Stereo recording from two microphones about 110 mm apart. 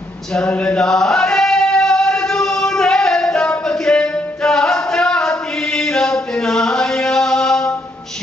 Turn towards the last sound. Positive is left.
turn(degrees=5)  # may be behind; listen again after turning